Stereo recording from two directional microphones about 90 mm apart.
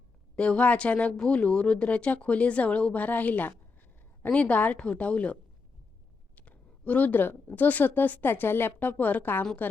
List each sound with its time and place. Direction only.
0.3 s a woman's voice: 15° left (ahead or behind)